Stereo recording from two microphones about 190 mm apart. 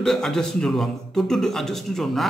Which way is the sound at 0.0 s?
Centre (ahead or behind).